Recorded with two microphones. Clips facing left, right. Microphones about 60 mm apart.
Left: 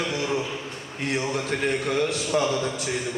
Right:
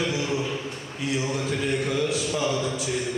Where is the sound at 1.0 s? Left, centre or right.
Left.